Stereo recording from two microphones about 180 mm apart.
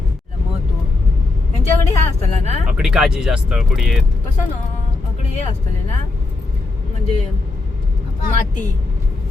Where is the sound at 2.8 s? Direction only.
Centre (ahead or behind).